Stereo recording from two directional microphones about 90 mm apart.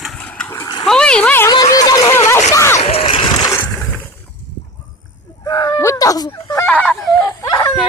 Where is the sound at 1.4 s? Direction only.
45° left (ahead or behind).